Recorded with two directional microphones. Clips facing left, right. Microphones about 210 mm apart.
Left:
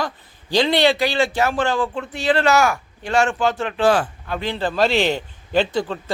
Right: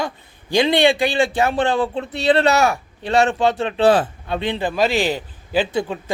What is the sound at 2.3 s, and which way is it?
Speech, 30° right (ahead or behind).